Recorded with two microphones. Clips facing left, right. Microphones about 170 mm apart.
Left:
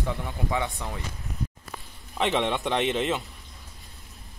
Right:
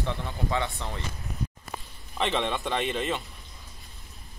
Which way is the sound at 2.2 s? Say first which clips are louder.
Left 3 dB; 15° left (ahead or behind).